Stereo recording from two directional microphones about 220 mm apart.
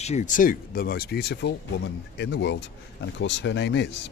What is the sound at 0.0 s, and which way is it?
Speech, 30° left (ahead or behind).